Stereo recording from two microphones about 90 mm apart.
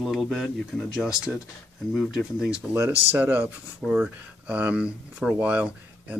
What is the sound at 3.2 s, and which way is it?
Speech, 15° right (ahead or behind).